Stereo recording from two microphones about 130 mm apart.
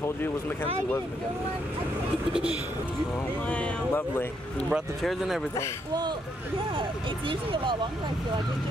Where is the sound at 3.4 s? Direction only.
10° left (ahead or behind).